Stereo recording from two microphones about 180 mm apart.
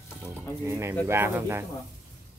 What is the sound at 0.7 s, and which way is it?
Speech, 15° right (ahead or behind).